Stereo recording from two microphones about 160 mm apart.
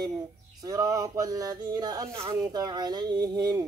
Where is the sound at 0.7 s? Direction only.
20° right (ahead or behind).